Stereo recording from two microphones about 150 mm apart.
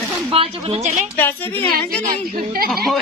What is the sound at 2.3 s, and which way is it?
Speech, 80° right.